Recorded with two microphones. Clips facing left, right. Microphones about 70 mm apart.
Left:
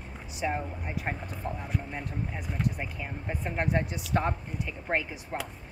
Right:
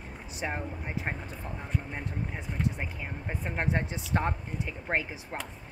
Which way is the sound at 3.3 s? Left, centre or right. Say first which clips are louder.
Left 2 dB; right.